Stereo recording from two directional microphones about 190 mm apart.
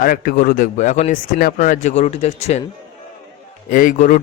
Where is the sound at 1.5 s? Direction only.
40° left (ahead or behind).